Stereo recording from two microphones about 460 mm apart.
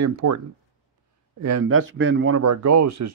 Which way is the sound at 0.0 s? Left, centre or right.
Right.